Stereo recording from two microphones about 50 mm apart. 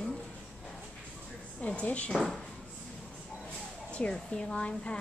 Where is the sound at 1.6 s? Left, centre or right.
Left.